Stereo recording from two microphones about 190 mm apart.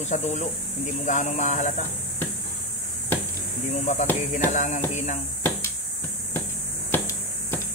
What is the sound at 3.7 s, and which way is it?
Speech, 40° left (ahead or behind).